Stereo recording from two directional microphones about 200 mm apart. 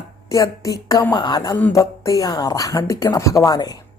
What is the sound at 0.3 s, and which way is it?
Speech, 15° left (ahead or behind).